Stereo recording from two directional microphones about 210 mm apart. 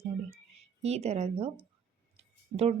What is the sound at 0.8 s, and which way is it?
A woman's voice, 30° right (ahead or behind).